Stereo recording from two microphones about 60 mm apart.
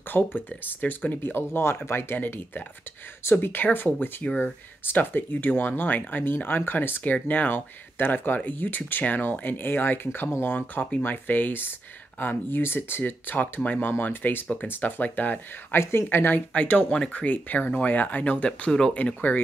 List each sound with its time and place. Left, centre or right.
0.1 s speech: left
1.3 s speech: left
15.8 s speech: left
16.5 s speech: left
18.9 s speech: left